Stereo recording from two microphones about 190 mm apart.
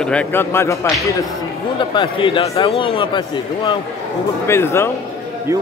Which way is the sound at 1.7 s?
25° left (ahead or behind).